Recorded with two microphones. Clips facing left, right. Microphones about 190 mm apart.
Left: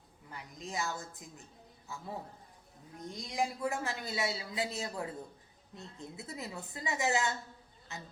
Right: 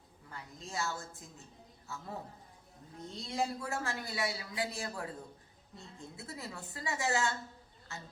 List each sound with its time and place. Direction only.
0.3 s a woman's voice: 15° left (ahead or behind)
3.1 s a man's voice: 15° left (ahead or behind)